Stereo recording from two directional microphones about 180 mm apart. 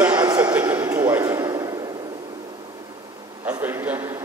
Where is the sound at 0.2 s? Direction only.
20° right (ahead or behind).